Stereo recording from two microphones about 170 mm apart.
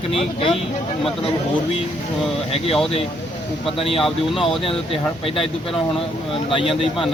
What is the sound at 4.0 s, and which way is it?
Speech, centre (ahead or behind).